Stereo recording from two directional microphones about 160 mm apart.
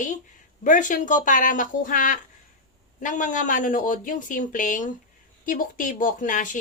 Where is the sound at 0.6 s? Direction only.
55° left (ahead or behind).